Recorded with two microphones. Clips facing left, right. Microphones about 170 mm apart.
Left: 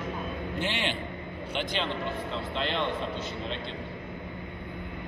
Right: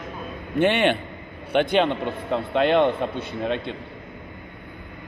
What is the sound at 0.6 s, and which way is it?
A man's voice, 60° right (ahead or behind).